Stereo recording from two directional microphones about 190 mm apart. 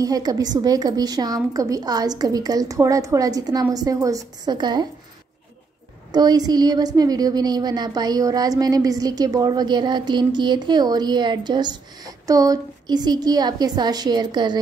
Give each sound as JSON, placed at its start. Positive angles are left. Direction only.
{"t": 0.0, "sound": "a woman's voice", "side_deg": -20}
{"t": 6.1, "sound": "a woman's voice", "side_deg": -20}